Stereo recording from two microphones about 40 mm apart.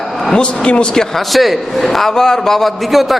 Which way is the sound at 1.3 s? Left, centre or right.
Centre.